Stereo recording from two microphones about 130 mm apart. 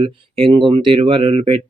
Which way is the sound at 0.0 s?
45° right (ahead or behind).